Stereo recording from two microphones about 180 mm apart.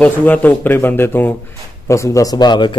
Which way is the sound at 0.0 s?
10° left (ahead or behind).